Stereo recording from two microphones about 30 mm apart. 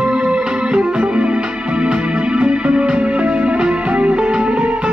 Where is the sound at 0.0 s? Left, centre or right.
Right.